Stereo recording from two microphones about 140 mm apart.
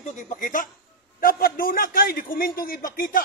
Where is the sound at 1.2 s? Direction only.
90° left.